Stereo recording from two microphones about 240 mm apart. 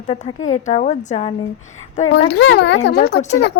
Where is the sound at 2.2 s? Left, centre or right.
Left.